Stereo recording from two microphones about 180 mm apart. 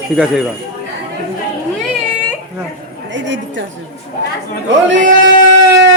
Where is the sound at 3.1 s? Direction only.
90° right.